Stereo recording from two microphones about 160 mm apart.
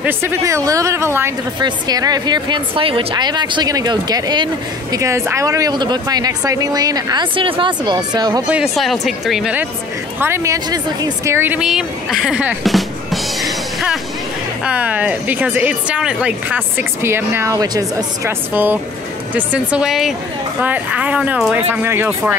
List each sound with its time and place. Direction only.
0.0 s a woman's voice: 15° right (ahead or behind)
8.5 s speech: 5° right (ahead or behind)